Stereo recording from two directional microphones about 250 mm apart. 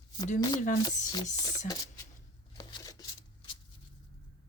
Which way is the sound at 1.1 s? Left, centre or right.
Centre.